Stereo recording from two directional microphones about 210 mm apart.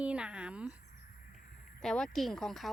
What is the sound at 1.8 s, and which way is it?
Speech, 5° left (ahead or behind).